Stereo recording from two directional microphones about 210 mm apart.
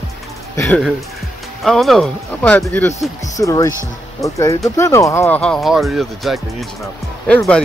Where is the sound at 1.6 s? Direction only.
Centre (ahead or behind).